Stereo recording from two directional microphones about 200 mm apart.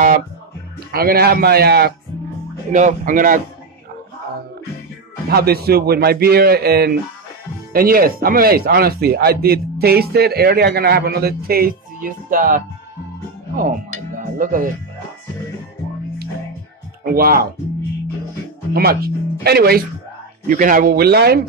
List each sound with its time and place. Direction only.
0.9 s speech: 50° right (ahead or behind)
2.7 s speech: 35° right (ahead or behind)
5.3 s speech: 50° right (ahead or behind)
17.0 s speech: 50° right (ahead or behind)
18.7 s speech: 50° right (ahead or behind)